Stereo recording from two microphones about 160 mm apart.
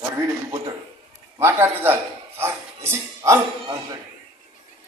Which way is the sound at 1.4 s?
15° right (ahead or behind).